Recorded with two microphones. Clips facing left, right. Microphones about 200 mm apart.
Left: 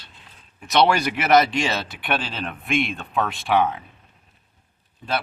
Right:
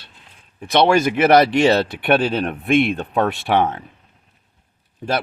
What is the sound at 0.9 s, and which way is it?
Speech, 45° right (ahead or behind).